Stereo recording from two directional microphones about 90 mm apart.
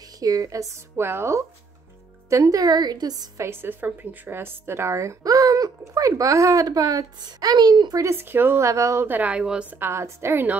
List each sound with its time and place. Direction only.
0.2 s a woman's voice: 40° right (ahead or behind)
3.4 s a woman's voice: 25° right (ahead or behind); by 8.0 s 50° right (ahead or behind)
8.0 s a woman's voice: 25° right (ahead or behind)
9.0 s a woman's voice: 20° right (ahead or behind)
9.8 s a woman's voice: 30° right (ahead or behind)